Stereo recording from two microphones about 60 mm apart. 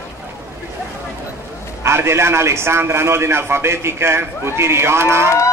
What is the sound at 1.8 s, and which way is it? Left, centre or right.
A man's voice, right.